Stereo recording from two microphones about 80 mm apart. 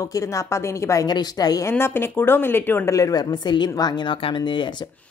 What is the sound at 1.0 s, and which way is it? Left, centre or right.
Speech, left.